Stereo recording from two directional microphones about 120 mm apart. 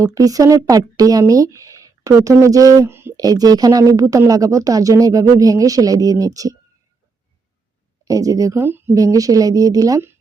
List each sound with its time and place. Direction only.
0.0 s a woman's voice: 30° right (ahead or behind)
3.2 s a woman's voice: 30° right (ahead or behind)
8.0 s a woman's voice: 30° right (ahead or behind)